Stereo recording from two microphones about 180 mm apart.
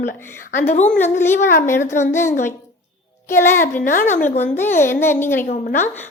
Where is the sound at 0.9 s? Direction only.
10° left (ahead or behind).